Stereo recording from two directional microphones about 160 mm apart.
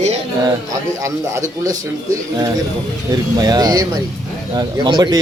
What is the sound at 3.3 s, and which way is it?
A man's voice, 25° right (ahead or behind).